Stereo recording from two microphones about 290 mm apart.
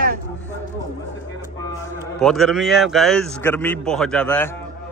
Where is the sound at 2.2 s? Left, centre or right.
Centre.